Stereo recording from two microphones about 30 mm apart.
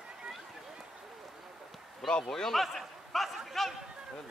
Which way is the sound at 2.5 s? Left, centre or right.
Centre.